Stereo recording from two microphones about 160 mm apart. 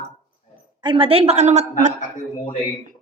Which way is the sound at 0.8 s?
30° right (ahead or behind).